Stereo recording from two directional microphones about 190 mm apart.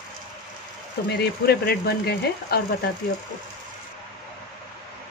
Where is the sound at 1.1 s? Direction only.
55° left (ahead or behind).